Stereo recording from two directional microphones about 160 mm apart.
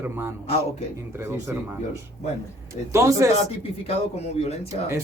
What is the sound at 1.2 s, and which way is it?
Speech, 20° right (ahead or behind).